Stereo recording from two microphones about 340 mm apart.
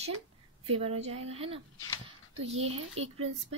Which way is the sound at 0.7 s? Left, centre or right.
Centre.